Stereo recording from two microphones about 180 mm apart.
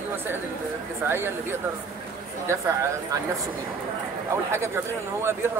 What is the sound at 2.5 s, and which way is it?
Speech, 15° right (ahead or behind).